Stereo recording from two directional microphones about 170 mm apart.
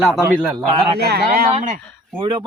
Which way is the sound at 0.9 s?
70° right (ahead or behind).